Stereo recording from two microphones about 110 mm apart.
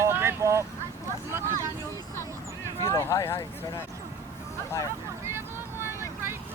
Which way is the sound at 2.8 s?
25° left (ahead or behind).